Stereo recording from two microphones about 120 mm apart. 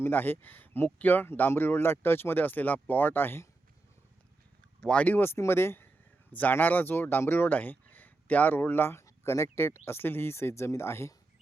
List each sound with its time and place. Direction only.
0.0 s speech: 15° left (ahead or behind)
4.8 s speech: 10° left (ahead or behind)